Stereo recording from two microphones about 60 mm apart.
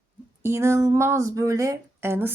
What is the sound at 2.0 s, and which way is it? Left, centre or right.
Speech, right.